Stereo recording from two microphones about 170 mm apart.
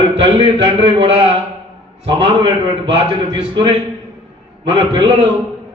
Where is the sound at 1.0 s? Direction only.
35° right (ahead or behind).